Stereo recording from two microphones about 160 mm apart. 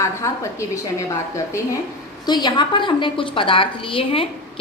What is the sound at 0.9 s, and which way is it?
A woman's voice, 20° left (ahead or behind).